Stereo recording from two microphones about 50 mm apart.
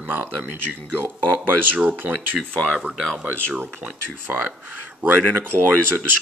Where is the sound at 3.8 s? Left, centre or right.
Right.